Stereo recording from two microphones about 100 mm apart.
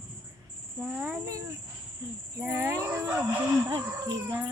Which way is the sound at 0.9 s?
5° left (ahead or behind).